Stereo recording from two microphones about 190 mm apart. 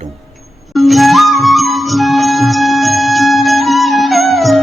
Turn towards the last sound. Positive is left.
turn(degrees=0)  # may be behind; listen again after turning